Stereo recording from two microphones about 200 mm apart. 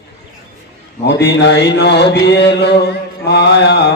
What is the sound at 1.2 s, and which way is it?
Chant, 55° left (ahead or behind).